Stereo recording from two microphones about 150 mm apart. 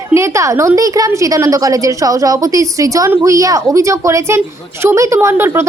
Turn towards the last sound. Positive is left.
turn(degrees=-15)  # may be behind; listen again after turning